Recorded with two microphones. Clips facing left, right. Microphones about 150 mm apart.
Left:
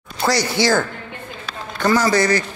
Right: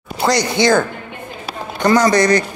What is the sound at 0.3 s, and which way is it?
Speech, 15° right (ahead or behind).